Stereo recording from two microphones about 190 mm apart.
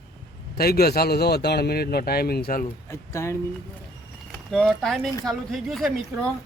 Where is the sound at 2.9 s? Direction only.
15° left (ahead or behind).